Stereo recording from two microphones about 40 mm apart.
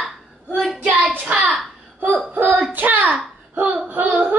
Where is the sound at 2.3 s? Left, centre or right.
Right.